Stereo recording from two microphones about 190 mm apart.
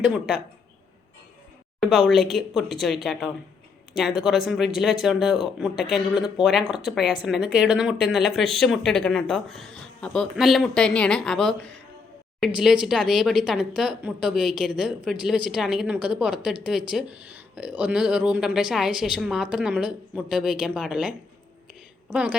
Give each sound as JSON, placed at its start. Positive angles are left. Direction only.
{"t": 0.1, "sound": "speech", "side_deg": 0}
{"t": 1.8, "sound": "speech", "side_deg": 0}
{"t": 12.6, "sound": "a woman's voice", "side_deg": -5}